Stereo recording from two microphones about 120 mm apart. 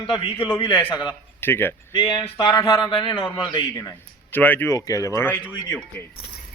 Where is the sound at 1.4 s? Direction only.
20° left (ahead or behind).